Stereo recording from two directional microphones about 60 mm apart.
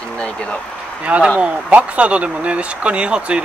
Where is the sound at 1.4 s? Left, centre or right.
Right.